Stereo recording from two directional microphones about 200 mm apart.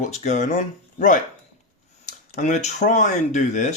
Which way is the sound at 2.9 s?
40° left (ahead or behind).